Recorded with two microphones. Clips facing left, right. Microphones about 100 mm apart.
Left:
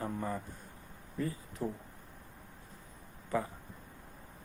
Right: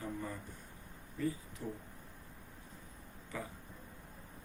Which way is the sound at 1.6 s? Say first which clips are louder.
Left 6 dB; 45° left (ahead or behind).